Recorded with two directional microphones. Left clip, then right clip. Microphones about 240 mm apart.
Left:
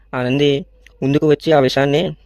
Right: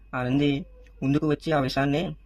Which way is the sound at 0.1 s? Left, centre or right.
Left.